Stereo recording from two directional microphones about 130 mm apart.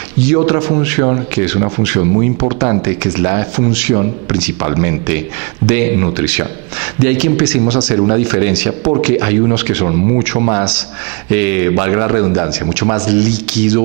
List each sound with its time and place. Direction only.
0.2 s a man's voice: 15° right (ahead or behind)